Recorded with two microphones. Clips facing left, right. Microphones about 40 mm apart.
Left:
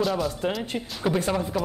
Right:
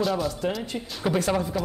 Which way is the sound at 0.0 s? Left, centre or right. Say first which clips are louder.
Even; centre.